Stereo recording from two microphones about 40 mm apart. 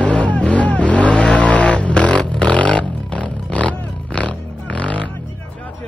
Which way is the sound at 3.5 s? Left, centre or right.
Left.